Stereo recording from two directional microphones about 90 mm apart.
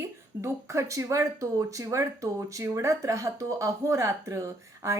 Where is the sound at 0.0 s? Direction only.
30° right (ahead or behind).